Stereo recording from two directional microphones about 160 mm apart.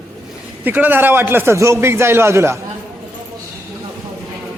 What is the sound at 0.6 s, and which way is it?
A man's voice, 10° right (ahead or behind).